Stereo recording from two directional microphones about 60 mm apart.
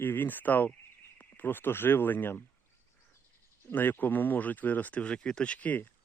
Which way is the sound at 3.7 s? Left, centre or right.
Left.